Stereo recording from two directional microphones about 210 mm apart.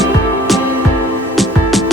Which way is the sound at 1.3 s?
Centre (ahead or behind).